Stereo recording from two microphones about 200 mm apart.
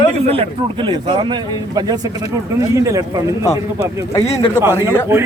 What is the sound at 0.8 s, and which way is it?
Speech, 25° right (ahead or behind).